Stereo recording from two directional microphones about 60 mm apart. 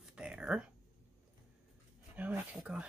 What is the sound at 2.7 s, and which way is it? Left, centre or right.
Speech, centre.